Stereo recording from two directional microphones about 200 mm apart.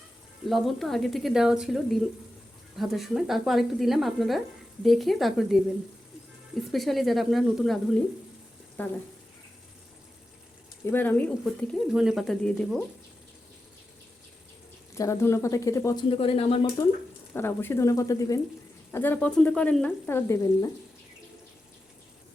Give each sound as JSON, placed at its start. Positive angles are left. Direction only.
{"t": 0.4, "sound": "speech", "side_deg": 0}
{"t": 6.7, "sound": "speech", "side_deg": 0}
{"t": 10.8, "sound": "speech", "side_deg": 10}
{"t": 14.9, "sound": "speech", "side_deg": 15}
{"t": 16.0, "sound": "speech", "side_deg": 30}
{"t": 17.3, "sound": "speech", "side_deg": 10}